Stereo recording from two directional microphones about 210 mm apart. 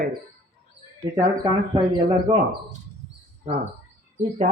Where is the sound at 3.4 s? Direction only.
30° right (ahead or behind).